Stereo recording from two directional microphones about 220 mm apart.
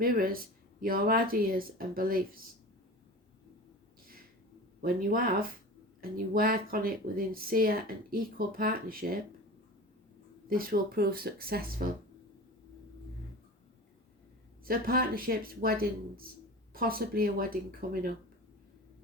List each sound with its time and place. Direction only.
0.0 s speech: 40° right (ahead or behind)
4.8 s speech: 40° right (ahead or behind)
10.5 s speech: 40° right (ahead or behind)
14.6 s speech: 40° right (ahead or behind)